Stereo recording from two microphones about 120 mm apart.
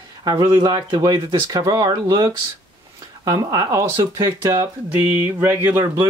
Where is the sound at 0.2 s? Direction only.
35° right (ahead or behind).